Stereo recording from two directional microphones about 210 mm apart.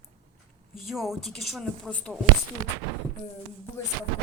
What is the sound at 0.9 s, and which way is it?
Speech, centre (ahead or behind).